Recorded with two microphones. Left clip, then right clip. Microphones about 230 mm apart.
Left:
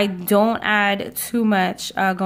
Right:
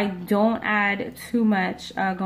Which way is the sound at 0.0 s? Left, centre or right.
Left.